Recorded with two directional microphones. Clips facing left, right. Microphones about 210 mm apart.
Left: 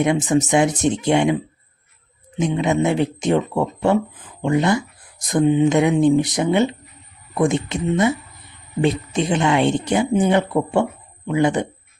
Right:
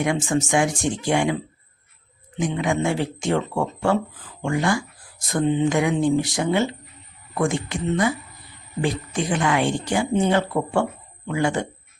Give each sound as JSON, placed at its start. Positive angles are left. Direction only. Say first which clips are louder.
{"t": 0.0, "sound": "speech", "louder": "left 5 dB", "side_deg": 20}
{"t": 2.4, "sound": "speech", "louder": "left 4 dB", "side_deg": 20}